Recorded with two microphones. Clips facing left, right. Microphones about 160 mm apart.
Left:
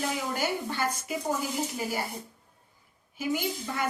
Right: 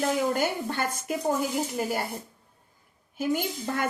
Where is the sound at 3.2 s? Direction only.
50° right (ahead or behind).